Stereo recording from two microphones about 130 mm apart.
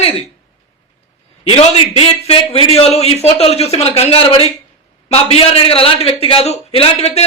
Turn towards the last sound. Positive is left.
turn(degrees=55)  # may be behind; listen again after turning